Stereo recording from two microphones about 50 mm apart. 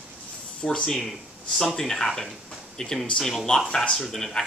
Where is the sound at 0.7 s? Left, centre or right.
Centre.